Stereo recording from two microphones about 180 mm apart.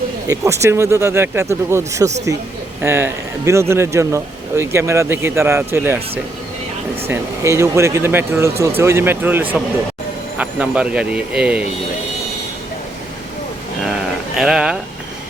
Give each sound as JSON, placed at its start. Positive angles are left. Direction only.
{"t": 0.3, "sound": "speech", "side_deg": -15}
{"t": 7.1, "sound": "speech", "side_deg": -15}
{"t": 14.3, "sound": "speech", "side_deg": -5}